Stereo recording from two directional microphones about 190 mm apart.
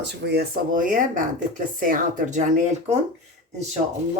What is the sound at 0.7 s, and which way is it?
A woman's voice, 45° right (ahead or behind).